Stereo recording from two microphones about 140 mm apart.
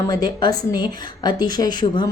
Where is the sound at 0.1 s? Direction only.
30° left (ahead or behind).